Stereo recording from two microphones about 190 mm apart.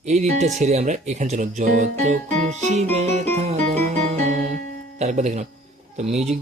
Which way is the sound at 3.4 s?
35° right (ahead or behind).